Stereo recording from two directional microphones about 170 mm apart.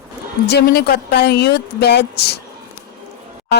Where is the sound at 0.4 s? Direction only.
75° left (ahead or behind).